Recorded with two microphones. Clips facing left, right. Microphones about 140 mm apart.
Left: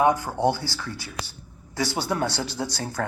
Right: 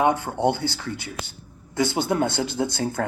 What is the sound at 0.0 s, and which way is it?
Speech, 25° right (ahead or behind).